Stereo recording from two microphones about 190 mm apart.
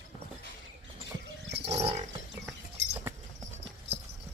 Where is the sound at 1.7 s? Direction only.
35° right (ahead or behind).